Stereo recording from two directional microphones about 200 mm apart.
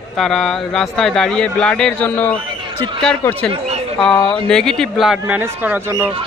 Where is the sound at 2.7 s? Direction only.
25° right (ahead or behind).